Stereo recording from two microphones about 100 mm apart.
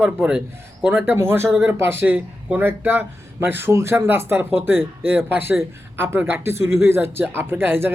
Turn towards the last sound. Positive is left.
turn(degrees=-20)  # may be behind; listen again after turning